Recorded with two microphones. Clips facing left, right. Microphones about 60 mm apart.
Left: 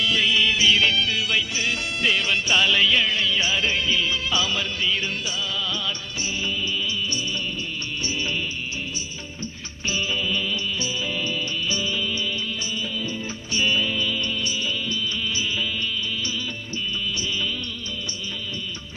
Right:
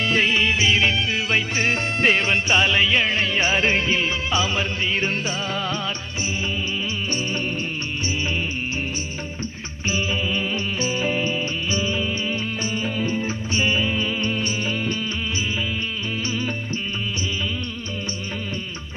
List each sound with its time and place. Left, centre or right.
0.0 s music: right
9.9 s music: right
16.2 s music: right